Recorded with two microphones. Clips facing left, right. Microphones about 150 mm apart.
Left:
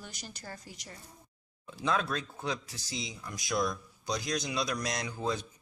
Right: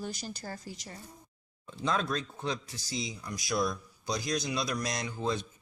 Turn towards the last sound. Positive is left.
turn(degrees=10)  # may be behind; listen again after turning